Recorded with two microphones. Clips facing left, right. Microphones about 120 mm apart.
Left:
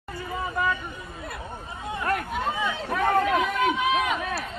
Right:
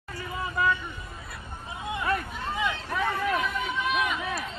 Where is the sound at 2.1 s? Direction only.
60° left (ahead or behind).